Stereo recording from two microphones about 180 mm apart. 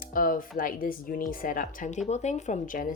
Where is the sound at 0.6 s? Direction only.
50° left (ahead or behind).